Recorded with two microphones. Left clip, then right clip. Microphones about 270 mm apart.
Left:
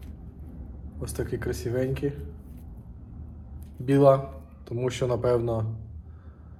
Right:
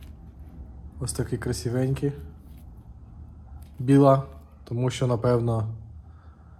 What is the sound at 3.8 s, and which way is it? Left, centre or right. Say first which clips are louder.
Speech: right 1 dB; right.